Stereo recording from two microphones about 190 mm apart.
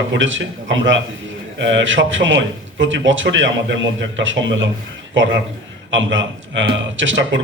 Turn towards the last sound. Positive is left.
turn(degrees=-80)